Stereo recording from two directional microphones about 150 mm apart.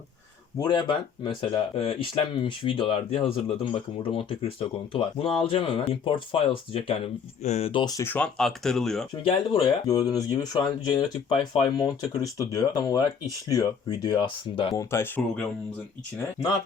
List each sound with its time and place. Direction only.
0.6 s speech: 30° left (ahead or behind)
8.0 s speech: 10° left (ahead or behind)
9.2 s speech: 35° left (ahead or behind)
9.8 s speech: 25° left (ahead or behind)
14.8 s speech: 15° left (ahead or behind)